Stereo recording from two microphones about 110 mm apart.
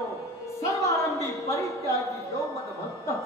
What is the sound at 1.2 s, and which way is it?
A capella, 30° left (ahead or behind).